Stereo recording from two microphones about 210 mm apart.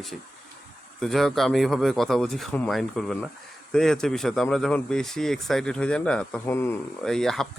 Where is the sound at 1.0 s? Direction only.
Centre (ahead or behind).